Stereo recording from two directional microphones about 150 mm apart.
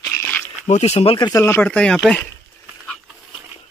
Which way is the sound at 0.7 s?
45° left (ahead or behind).